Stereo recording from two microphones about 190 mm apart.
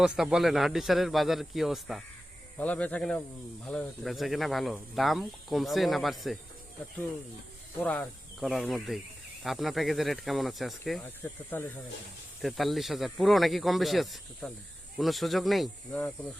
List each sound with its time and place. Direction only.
0.0 s speech: 5° right (ahead or behind)
7.8 s speech: 5° left (ahead or behind)